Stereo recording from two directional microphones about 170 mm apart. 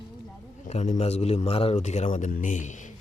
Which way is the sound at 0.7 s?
40° left (ahead or behind).